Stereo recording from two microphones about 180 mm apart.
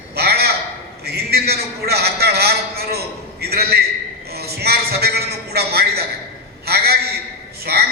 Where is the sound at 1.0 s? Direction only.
60° right (ahead or behind).